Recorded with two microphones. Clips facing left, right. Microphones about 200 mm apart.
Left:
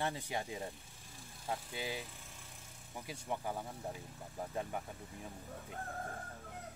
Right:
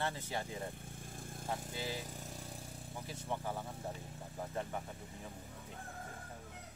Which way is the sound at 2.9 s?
15° left (ahead or behind).